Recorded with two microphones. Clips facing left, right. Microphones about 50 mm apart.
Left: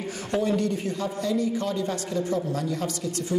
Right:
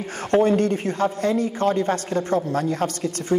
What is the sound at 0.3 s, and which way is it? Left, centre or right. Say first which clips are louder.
A man's voice: right 7 dB; right.